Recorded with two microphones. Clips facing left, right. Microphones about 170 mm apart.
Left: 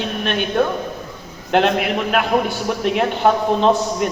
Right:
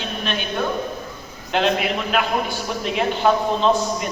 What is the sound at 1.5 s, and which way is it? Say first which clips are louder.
A man's voice: left 4 dB; 55° left (ahead or behind).